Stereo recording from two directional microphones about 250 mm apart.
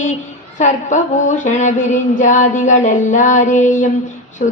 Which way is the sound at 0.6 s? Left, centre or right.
Left.